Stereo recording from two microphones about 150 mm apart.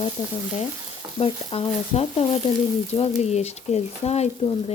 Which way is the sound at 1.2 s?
40° left (ahead or behind).